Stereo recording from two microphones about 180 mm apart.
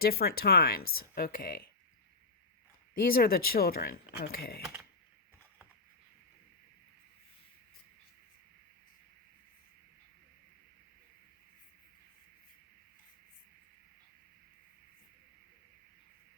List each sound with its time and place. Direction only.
0.0 s speech: 60° left (ahead or behind)
3.1 s speech: 55° left (ahead or behind)